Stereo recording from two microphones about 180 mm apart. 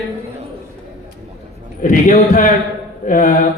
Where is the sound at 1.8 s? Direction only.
45° left (ahead or behind).